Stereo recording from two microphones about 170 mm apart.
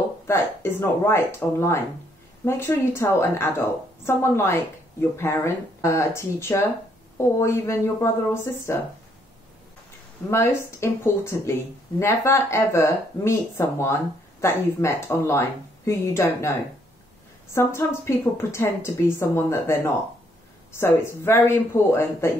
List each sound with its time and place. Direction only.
0.3 s a woman's voice: 15° left (ahead or behind)
10.3 s a woman's voice: 15° left (ahead or behind)
17.6 s a woman's voice: 15° left (ahead or behind)